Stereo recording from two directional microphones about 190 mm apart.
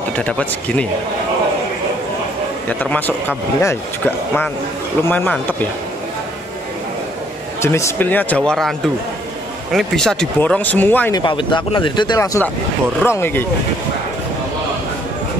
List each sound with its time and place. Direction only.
0.2 s speech: 5° left (ahead or behind)
2.8 s speech: 10° left (ahead or behind)
7.6 s speech: 15° left (ahead or behind)
11.1 s speech: 25° left (ahead or behind)